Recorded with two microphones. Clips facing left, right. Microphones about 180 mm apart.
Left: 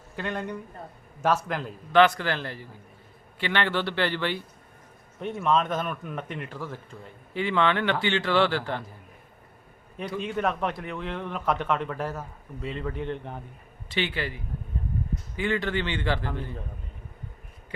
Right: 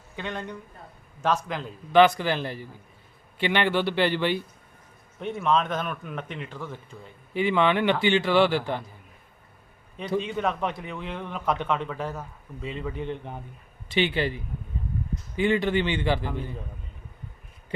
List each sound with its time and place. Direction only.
0.2 s a man's voice: 5° left (ahead or behind)
1.9 s a man's voice: 15° right (ahead or behind)
5.2 s speech: 5° left (ahead or behind)
7.3 s a man's voice: 15° right (ahead or behind)
10.2 s speech: 5° left (ahead or behind)
13.9 s speech: 20° right (ahead or behind)
15.4 s a man's voice: 15° right (ahead or behind)